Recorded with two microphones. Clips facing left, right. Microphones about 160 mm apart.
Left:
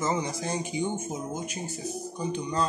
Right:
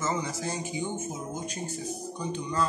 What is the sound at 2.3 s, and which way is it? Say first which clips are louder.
Speech: left 1 dB; 20° left (ahead or behind).